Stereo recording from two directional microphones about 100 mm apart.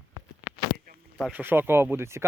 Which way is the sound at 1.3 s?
20° right (ahead or behind).